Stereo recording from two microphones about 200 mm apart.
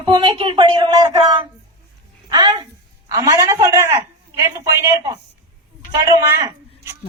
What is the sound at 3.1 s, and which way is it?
A woman's voice, 20° right (ahead or behind).